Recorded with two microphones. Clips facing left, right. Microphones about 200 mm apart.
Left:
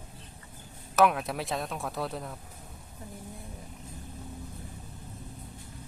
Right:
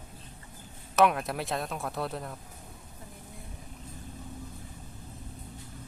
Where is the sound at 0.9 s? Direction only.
Centre (ahead or behind).